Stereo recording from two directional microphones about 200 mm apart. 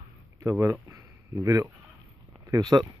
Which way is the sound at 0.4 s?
15° right (ahead or behind).